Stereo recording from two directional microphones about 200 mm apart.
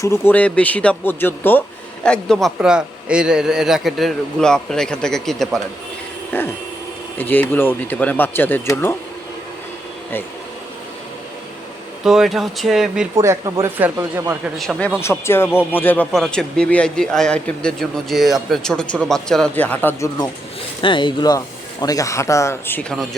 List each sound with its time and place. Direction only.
0.0 s speech: 10° left (ahead or behind)
12.0 s speech: centre (ahead or behind)
13.1 s speech: 15° right (ahead or behind); by 20.1 s 10° left (ahead or behind)
20.8 s speech: 25° left (ahead or behind); by 23.0 s 5° left (ahead or behind)